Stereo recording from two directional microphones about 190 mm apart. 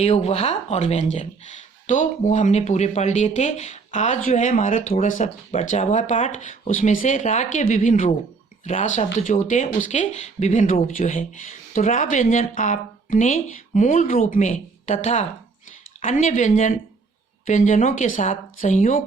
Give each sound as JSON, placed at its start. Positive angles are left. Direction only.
{"t": 0.0, "sound": "speech", "side_deg": 35}